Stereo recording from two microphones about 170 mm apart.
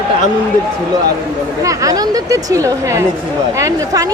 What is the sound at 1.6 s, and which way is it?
A woman's voice, 20° right (ahead or behind).